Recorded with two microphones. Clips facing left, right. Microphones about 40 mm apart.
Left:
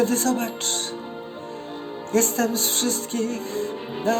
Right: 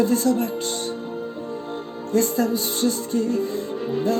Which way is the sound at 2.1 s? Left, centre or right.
Left.